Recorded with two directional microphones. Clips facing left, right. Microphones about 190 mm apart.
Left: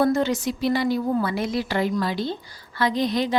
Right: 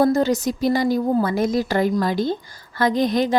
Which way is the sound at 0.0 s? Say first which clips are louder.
Right 3 dB; 40° right (ahead or behind).